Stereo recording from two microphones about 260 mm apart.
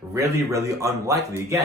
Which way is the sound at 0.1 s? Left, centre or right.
Centre.